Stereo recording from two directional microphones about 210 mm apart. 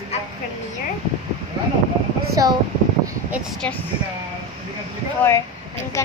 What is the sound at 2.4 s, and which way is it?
Speech, 15° right (ahead or behind).